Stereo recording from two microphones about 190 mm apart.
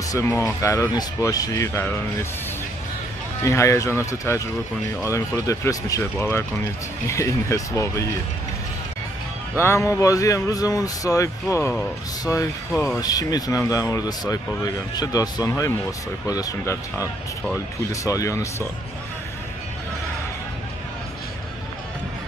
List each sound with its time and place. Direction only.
0.1 s speech: 15° left (ahead or behind)
3.4 s speech: 15° left (ahead or behind)
9.6 s speech: 15° left (ahead or behind)
12.8 s speech: 15° left (ahead or behind)